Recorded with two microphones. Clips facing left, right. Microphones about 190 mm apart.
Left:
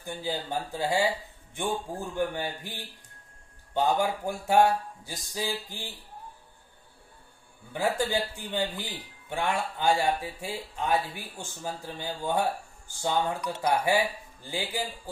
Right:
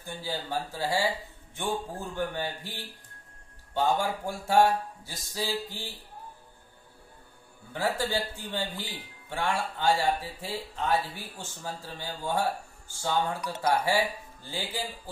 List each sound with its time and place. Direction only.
0.0 s speech: 15° left (ahead or behind)
3.7 s speech: 15° left (ahead or behind)
7.7 s speech: 15° left (ahead or behind)